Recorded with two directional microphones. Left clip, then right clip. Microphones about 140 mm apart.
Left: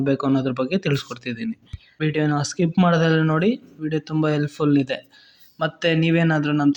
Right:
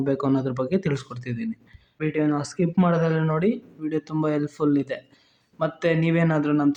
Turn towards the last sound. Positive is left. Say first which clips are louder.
# left 2 dB
turn(degrees=15)  # may be behind; listen again after turning